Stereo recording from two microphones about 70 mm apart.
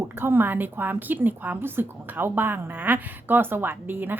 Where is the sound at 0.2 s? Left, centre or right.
Right.